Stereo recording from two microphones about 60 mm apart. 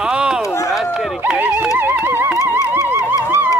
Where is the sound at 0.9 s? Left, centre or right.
Centre.